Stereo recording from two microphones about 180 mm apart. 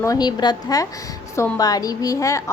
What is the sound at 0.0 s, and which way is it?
A woman's voice, 20° left (ahead or behind).